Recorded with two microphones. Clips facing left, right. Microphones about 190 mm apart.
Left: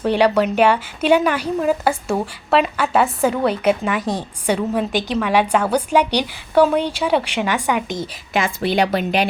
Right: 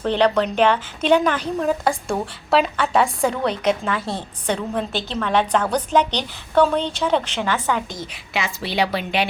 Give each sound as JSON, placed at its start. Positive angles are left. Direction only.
{"t": 0.0, "sound": "a woman's voice", "side_deg": 10}
{"t": 8.3, "sound": "a woman's voice", "side_deg": 50}